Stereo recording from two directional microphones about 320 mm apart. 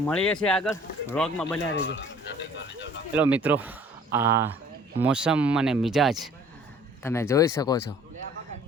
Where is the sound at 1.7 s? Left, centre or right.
Left.